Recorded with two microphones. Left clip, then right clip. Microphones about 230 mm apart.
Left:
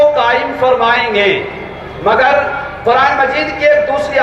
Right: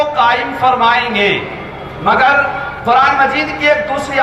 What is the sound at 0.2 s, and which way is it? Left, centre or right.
A man's voice, right.